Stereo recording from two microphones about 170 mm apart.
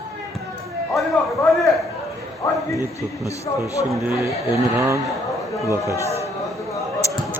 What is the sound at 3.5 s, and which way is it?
Speech, 25° left (ahead or behind).